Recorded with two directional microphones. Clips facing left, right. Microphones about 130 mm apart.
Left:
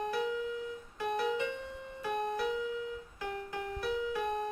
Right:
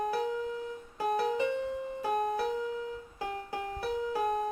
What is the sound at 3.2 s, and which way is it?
Music, 35° right (ahead or behind).